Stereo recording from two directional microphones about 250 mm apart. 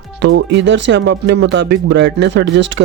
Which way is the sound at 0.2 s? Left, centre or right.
Right.